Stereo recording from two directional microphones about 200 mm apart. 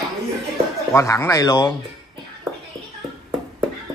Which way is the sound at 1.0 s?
15° left (ahead or behind).